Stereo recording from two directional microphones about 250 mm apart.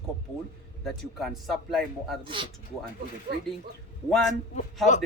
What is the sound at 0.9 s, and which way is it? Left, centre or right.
A man's voice, centre.